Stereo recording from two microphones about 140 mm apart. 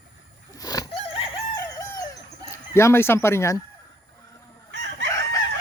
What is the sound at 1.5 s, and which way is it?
Chicken, 25° left (ahead or behind).